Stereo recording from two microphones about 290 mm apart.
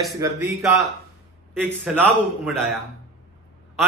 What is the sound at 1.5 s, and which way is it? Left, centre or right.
A man's voice, centre.